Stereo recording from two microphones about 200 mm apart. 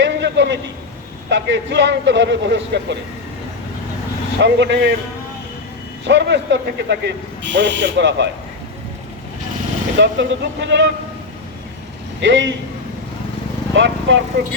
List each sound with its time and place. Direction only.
0.0 s a sound: 60° right (ahead or behind)
1.3 s a man's voice: 60° right (ahead or behind)
4.4 s a man's voice: 60° right (ahead or behind)
6.1 s a man's voice: 60° right (ahead or behind)
10.0 s a man's voice: 65° right (ahead or behind)
12.2 s a man's voice: 65° right (ahead or behind)
13.7 s a man's voice: 65° right (ahead or behind)